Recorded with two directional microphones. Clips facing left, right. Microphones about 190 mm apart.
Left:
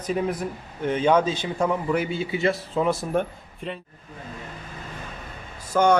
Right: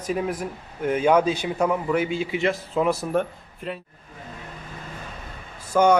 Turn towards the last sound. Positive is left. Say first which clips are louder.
# right 1 dB
turn(degrees=-10)  # may be behind; listen again after turning